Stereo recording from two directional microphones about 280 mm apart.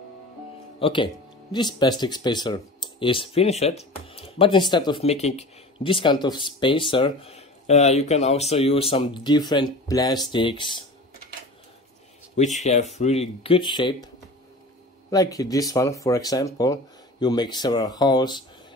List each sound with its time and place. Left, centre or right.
0.7 s speech: centre
12.4 s speech: left